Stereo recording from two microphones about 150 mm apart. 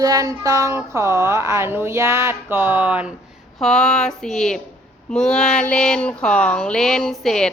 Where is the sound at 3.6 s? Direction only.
5° left (ahead or behind).